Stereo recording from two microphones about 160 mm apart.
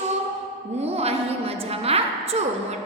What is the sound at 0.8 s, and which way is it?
A woman's voice, 40° right (ahead or behind).